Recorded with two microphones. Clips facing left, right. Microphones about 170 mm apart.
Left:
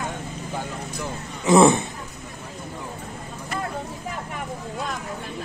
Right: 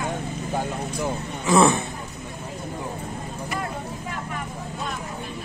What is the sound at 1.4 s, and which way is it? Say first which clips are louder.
Speech: left 3 dB; 20° left (ahead or behind).